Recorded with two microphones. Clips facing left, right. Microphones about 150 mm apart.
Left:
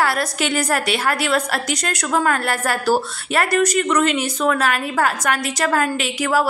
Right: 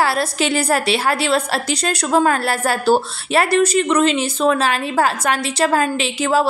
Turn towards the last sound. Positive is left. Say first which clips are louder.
# right 2 dB
turn(degrees=-25)  # may be behind; listen again after turning